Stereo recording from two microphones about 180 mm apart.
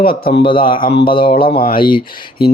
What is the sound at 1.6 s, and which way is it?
Speech, 55° left (ahead or behind).